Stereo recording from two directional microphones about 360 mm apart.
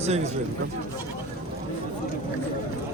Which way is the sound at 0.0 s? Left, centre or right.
Centre.